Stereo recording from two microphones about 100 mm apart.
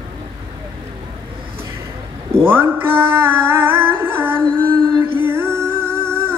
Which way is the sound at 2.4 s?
20° right (ahead or behind).